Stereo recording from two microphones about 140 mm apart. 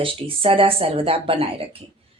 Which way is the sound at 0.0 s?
40° right (ahead or behind).